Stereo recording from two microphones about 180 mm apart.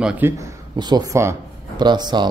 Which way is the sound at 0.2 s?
10° right (ahead or behind).